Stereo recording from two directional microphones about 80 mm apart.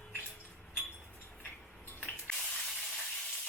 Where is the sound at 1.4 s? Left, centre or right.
Centre.